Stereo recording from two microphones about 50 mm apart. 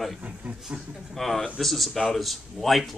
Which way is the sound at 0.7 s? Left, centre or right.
Right.